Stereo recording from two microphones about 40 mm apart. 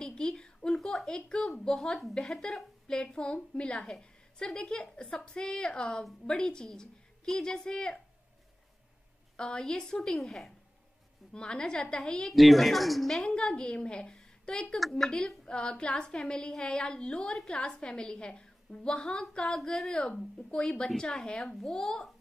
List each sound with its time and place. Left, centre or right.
0.0 s a woman's voice: centre
0.7 s a sound: centre
1.0 s a woman's voice: centre
2.9 s a woman's voice: left
9.4 s speech: centre
10.1 s speech: centre
11.3 s a woman's voice: left
12.4 s speech: centre
13.3 s a woman's voice: left
14.8 s speech: centre
15.0 s a woman's voice: centre